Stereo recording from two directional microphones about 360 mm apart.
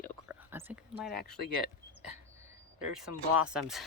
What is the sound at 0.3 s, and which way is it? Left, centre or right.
Whispering, centre.